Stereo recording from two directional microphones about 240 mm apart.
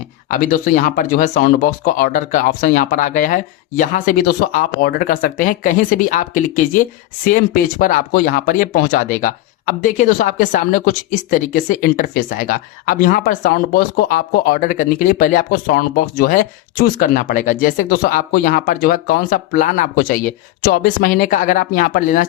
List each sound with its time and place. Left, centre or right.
0.3 s speech: left